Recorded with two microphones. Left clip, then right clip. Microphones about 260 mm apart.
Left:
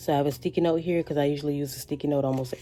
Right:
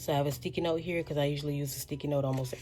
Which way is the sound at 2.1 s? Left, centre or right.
Left.